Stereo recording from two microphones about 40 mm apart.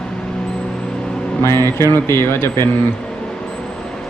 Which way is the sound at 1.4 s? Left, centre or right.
Left.